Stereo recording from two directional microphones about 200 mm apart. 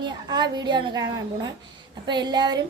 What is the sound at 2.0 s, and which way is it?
Speech, 20° right (ahead or behind).